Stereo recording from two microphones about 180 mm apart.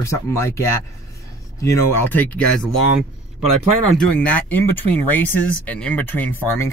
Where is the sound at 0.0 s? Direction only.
15° left (ahead or behind).